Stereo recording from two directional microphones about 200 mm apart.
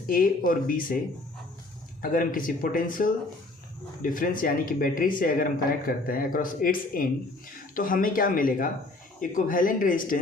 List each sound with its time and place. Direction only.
0.1 s speech: 45° left (ahead or behind)
2.0 s speech: 45° left (ahead or behind)